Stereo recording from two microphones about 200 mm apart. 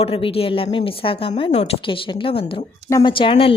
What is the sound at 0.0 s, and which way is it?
A woman's voice, 25° left (ahead or behind).